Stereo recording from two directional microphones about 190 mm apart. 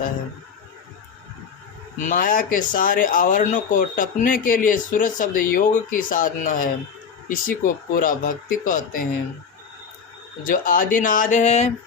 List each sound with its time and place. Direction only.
2.0 s speech: 45° left (ahead or behind)
10.4 s speech: 45° left (ahead or behind)